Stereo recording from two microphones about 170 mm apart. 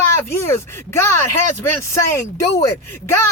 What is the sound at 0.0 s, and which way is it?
Speech, 15° left (ahead or behind).